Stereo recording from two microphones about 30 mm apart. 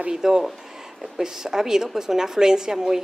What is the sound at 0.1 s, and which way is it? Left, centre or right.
A woman's voice, centre.